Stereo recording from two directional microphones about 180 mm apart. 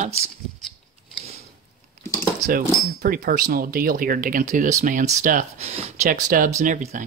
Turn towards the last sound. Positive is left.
turn(degrees=-40)  # may be behind; listen again after turning